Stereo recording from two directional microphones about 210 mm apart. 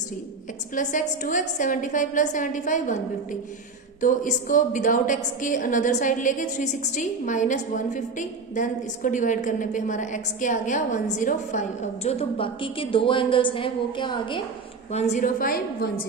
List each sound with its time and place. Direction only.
0.8 s a woman's voice: 35° left (ahead or behind)
4.0 s a woman's voice: 40° left (ahead or behind); by 14.4 s 20° left (ahead or behind)
14.9 s a woman's voice: 35° left (ahead or behind)